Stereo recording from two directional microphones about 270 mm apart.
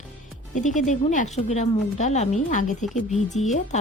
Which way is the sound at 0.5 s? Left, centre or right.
Left.